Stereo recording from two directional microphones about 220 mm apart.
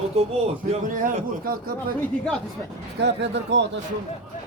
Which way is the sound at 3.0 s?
50° right (ahead or behind).